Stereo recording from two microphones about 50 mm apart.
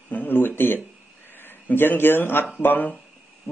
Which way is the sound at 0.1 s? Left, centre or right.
Left.